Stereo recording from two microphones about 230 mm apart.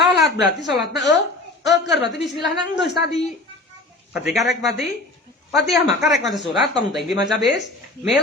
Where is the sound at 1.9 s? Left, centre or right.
Left.